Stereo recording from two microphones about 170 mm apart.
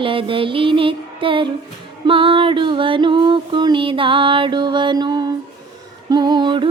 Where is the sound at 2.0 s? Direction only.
30° right (ahead or behind).